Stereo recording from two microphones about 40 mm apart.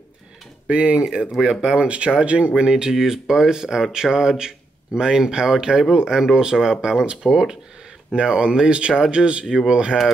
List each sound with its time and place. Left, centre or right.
0.7 s speech: right
1.0 s speech: centre